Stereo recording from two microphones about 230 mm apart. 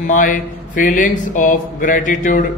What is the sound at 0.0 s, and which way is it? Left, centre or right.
Speech, left.